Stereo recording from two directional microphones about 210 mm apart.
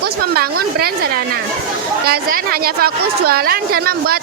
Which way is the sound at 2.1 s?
45° right (ahead or behind).